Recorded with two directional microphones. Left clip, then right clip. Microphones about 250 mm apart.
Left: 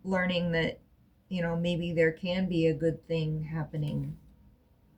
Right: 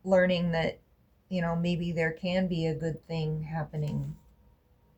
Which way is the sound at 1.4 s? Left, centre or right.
Right.